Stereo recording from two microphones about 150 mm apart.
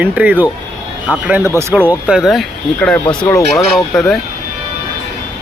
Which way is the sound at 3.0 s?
35° left (ahead or behind).